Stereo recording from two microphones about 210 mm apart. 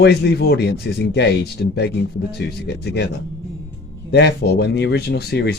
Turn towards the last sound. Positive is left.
turn(degrees=50)  # may be behind; listen again after turning